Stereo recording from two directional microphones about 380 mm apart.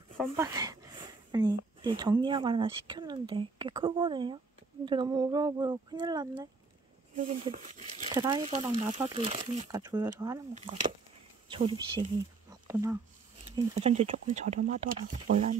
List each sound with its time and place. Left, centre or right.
0.2 s speech: centre